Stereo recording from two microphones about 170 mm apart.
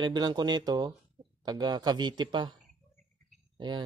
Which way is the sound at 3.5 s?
25° right (ahead or behind).